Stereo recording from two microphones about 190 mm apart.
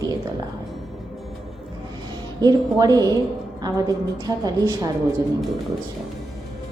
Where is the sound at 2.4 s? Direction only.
20° right (ahead or behind).